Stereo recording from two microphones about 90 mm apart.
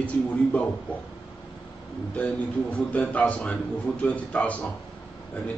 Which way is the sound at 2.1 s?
15° left (ahead or behind).